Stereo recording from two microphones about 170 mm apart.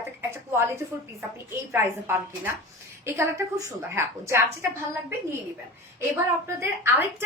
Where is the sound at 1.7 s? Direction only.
15° right (ahead or behind).